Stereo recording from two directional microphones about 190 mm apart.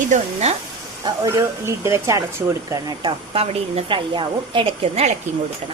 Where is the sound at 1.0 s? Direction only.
20° right (ahead or behind).